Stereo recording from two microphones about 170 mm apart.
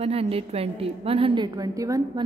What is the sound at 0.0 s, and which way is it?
A woman's voice, 35° right (ahead or behind).